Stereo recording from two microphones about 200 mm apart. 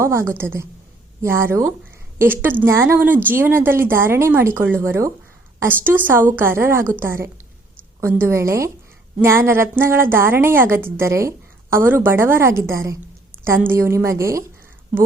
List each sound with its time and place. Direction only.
0.0 s a woman's voice: 15° right (ahead or behind)